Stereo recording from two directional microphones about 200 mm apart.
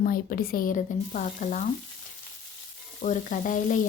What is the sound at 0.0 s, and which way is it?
Speech, 45° left (ahead or behind).